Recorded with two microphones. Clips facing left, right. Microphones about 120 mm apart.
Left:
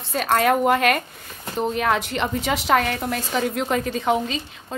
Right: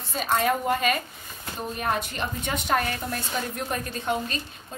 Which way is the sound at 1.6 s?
85° left.